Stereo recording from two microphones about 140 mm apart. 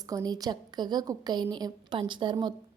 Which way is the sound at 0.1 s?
25° right (ahead or behind).